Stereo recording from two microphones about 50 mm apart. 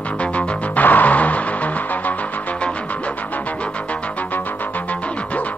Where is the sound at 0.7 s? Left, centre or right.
Left.